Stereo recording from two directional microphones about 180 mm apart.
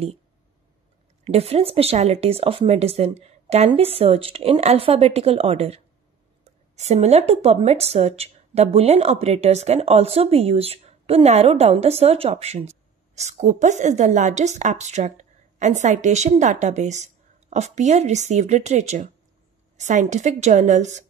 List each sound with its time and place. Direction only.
1.2 s a woman's voice: 35° right (ahead or behind)